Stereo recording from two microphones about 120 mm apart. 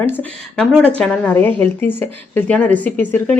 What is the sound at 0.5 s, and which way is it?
Speech, 5° left (ahead or behind).